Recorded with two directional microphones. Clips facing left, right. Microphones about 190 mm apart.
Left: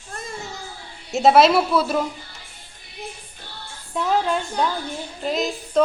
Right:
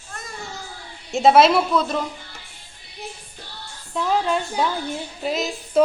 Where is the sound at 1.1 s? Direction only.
Centre (ahead or behind).